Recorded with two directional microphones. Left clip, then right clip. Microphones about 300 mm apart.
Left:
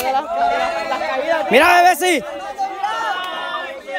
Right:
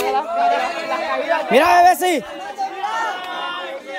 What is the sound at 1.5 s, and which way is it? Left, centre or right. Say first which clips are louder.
Speech: left 1 dB; centre.